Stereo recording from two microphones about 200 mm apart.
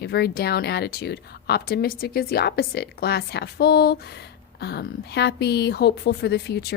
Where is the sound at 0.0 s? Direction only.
55° left (ahead or behind).